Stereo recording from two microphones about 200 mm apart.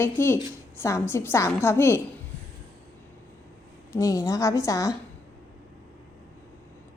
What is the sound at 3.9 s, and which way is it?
A woman's voice, 15° left (ahead or behind).